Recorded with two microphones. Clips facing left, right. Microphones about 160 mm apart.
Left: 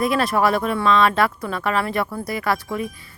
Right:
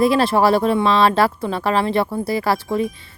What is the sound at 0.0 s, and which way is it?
Speech, 30° right (ahead or behind).